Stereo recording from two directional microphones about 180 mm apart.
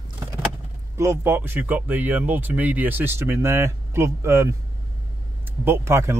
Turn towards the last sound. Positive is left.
turn(degrees=-15)  # may be behind; listen again after turning